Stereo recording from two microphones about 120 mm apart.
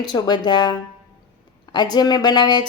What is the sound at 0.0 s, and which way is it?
Speech, 35° left (ahead or behind).